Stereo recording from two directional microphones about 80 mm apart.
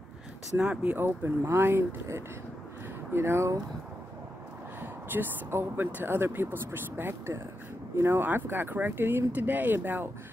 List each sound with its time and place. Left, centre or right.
0.6 s speech: centre
0.9 s speech: right
5.1 s speech: right